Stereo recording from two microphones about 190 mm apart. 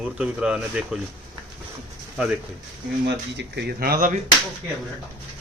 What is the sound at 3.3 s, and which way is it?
Speech, 60° right (ahead or behind).